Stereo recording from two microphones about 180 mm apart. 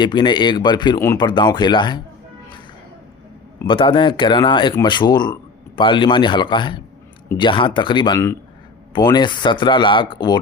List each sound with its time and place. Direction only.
0.0 s a man's voice: 25° left (ahead or behind)
3.7 s a man's voice: 30° left (ahead or behind)